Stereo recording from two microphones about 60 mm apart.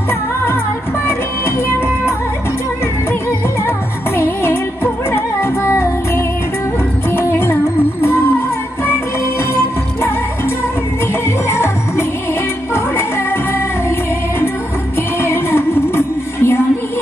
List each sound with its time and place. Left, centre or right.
4.2 s music: left
11.4 s music: left
15.2 s music: left